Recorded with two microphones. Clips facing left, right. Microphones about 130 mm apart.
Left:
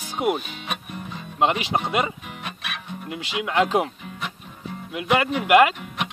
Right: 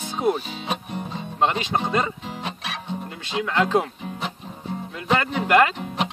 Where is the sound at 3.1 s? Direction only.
15° left (ahead or behind).